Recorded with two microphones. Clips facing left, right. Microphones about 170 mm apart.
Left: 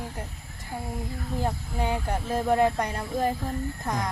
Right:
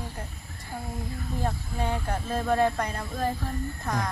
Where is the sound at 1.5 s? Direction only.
15° left (ahead or behind).